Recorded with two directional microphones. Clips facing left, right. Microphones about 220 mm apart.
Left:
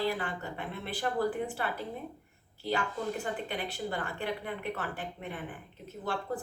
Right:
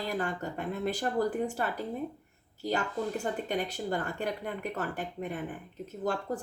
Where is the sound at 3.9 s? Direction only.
45° right (ahead or behind).